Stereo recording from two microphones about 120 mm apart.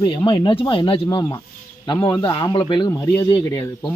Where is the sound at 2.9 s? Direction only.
20° left (ahead or behind).